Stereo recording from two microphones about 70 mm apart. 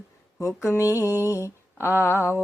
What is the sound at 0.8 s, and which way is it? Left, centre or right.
Mantra, left.